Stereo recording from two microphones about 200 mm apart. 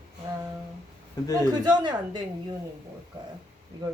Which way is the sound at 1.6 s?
20° right (ahead or behind).